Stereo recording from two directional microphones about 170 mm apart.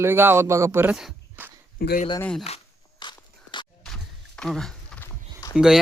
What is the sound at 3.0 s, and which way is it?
Walk, 25° left (ahead or behind).